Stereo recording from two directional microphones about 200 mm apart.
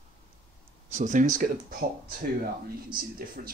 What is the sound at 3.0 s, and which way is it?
Speech, 45° right (ahead or behind).